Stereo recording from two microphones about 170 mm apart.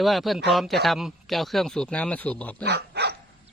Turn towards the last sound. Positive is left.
turn(degrees=-75)  # may be behind; listen again after turning